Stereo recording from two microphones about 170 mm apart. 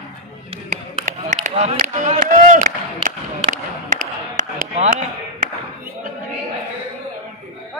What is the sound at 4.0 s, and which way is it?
Chop, 50° right (ahead or behind).